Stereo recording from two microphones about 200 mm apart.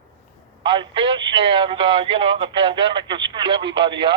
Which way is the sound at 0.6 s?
25° right (ahead or behind).